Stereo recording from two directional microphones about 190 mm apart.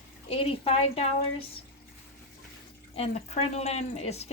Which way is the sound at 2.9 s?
30° left (ahead or behind).